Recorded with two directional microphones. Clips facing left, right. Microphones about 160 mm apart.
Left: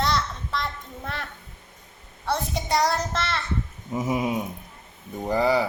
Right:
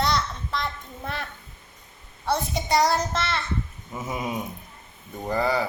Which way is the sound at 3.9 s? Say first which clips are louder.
Left 5 dB; 15° left (ahead or behind).